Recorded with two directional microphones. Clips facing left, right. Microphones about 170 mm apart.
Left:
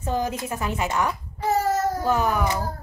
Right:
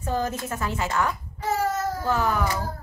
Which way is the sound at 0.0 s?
15° left (ahead or behind).